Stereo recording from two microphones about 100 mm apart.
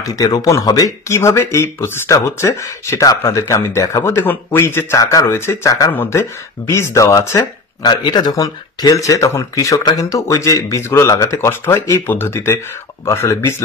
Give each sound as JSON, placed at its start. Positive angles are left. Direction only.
{"t": 0.0, "sound": "speech", "side_deg": 35}